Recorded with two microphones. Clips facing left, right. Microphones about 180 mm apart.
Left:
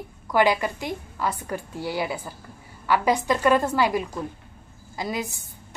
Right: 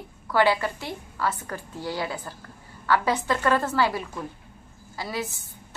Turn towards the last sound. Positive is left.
turn(degrees=15)  # may be behind; listen again after turning